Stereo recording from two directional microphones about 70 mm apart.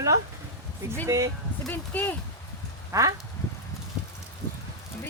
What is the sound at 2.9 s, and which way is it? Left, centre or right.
Speech, right.